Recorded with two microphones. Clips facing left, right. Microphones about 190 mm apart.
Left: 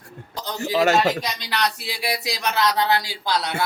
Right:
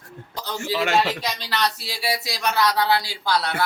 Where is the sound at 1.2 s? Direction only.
15° left (ahead or behind).